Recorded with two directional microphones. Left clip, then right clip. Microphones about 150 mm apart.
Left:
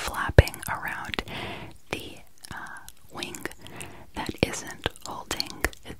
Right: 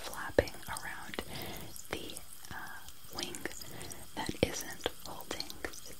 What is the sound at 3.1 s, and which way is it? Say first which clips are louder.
Drip: left 5 dB; 35° left (ahead or behind).